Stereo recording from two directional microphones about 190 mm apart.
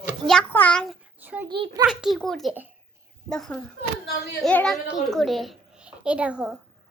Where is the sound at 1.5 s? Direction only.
25° right (ahead or behind).